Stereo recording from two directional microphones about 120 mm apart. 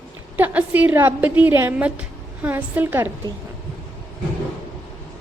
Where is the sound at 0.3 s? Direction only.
15° right (ahead or behind).